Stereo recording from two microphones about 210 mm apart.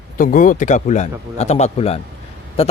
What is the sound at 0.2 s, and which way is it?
Speech, 40° left (ahead or behind).